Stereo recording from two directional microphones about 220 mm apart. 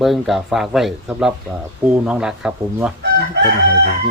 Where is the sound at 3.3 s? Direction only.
50° right (ahead or behind).